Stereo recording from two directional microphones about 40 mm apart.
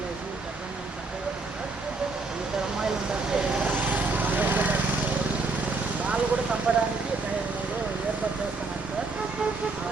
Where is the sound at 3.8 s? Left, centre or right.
Right.